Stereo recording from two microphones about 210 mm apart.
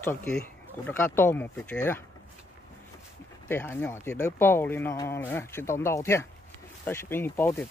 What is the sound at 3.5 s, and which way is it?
Speech, 10° left (ahead or behind).